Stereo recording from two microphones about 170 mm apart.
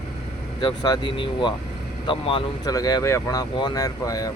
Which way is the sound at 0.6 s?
25° left (ahead or behind).